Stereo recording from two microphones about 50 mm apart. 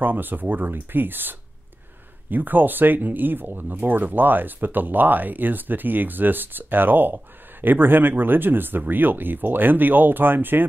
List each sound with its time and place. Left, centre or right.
0.0 s speech: right
2.3 s speech: right